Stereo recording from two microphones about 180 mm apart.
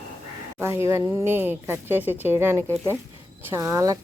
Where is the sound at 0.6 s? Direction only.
15° right (ahead or behind).